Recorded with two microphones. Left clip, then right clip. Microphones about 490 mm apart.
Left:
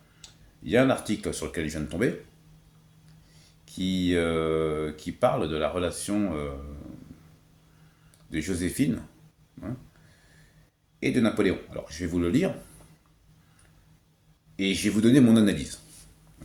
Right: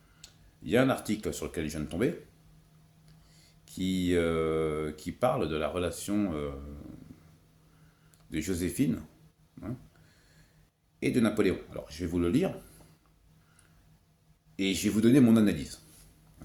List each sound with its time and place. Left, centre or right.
0.2 s speech: right
3.7 s speech: right
8.3 s speech: right
11.0 s speech: right
14.5 s speech: right